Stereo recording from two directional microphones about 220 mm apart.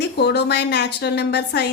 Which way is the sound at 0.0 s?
50° left (ahead or behind).